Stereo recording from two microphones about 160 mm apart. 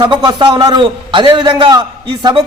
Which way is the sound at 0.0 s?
30° right (ahead or behind).